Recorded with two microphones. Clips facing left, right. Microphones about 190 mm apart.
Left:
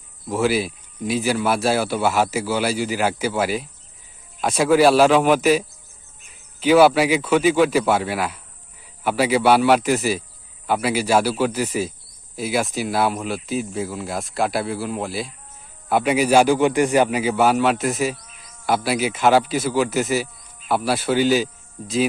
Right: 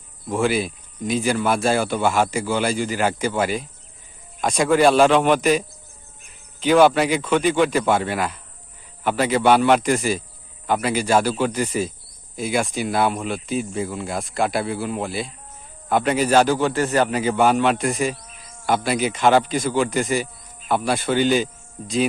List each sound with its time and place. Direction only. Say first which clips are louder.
0.3 s a man's voice: left 1 dB; 5° left (ahead or behind)
18.3 s insect: right 4 dB; 50° right (ahead or behind)
18.6 s a man's voice: even; 5° left (ahead or behind)